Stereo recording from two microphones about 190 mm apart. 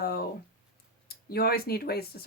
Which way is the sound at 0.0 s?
55° left (ahead or behind).